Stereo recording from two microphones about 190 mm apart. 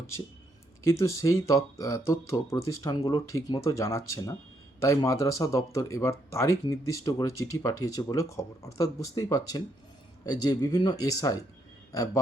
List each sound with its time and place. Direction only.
0.9 s speech: 15° left (ahead or behind)